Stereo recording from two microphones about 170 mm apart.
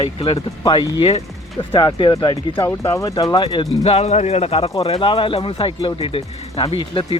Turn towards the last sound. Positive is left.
turn(degrees=30)  # may be behind; listen again after turning